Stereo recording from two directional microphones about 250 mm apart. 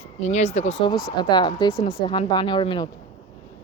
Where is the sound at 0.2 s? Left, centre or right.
Left.